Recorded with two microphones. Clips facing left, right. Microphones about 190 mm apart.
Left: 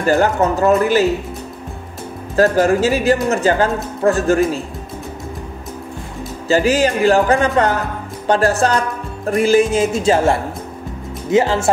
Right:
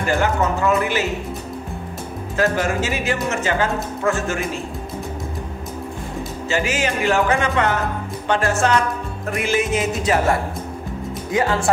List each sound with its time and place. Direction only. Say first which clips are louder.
0.0 s speech: left 5 dB; 40° left (ahead or behind)
2.3 s speech: left 7 dB; 35° left (ahead or behind)
6.5 s speech: left 8 dB; 35° left (ahead or behind)